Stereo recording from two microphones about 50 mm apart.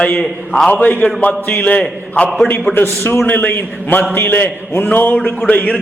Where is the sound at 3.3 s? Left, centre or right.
Left.